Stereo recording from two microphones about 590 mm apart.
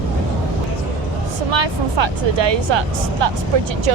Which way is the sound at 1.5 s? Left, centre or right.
Right.